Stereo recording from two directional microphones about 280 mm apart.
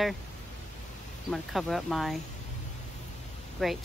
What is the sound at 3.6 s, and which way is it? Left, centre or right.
Speech, centre.